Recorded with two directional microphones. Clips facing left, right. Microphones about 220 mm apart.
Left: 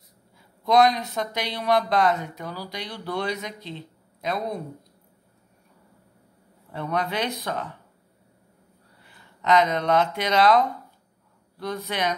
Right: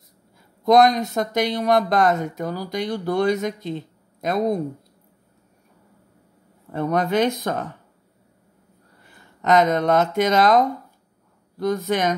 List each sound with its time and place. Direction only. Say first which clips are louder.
0.7 s speech: right 4 dB; 45° right (ahead or behind)
6.7 s speech: right 7 dB; 45° right (ahead or behind)
9.4 s speech: right 4 dB; 45° right (ahead or behind)